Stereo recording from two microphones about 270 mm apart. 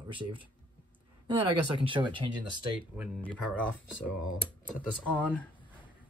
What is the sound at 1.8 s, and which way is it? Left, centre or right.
Speech, centre.